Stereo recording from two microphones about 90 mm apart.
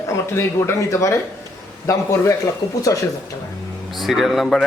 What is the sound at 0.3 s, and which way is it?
Speech, 30° left (ahead or behind).